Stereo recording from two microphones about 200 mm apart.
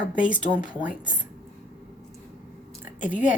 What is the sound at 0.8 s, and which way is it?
Speech, 5° right (ahead or behind).